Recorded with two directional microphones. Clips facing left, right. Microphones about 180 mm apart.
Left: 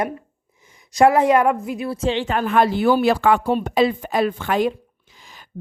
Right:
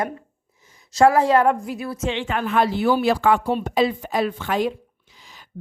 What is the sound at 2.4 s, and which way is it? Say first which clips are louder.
A woman's voice: left 2 dB; 50° left (ahead or behind).